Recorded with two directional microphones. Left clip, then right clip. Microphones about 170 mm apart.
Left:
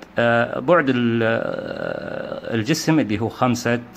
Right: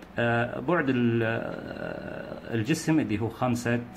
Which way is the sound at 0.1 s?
40° left (ahead or behind).